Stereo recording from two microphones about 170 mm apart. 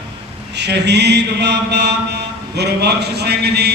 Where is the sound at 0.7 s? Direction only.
85° right.